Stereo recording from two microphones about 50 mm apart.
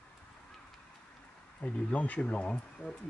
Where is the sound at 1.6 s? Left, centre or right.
Left.